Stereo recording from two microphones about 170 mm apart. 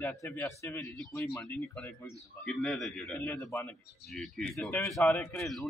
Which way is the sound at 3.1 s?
15° left (ahead or behind).